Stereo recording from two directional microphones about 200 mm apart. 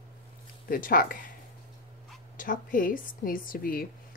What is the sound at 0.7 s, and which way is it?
Speech, 45° left (ahead or behind).